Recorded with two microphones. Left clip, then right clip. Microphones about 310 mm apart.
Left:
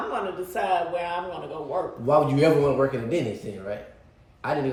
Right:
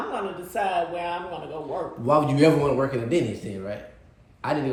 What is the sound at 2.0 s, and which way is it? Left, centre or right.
A man's voice, right.